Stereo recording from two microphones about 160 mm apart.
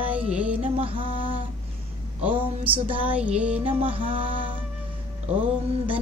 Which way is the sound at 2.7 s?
35° right (ahead or behind).